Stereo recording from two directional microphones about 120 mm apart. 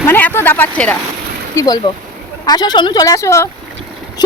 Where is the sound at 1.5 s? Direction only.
25° left (ahead or behind).